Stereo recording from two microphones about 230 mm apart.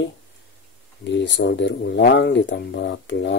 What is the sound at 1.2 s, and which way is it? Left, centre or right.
Speech, left.